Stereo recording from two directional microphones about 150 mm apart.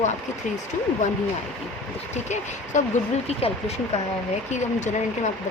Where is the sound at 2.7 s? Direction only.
55° left (ahead or behind).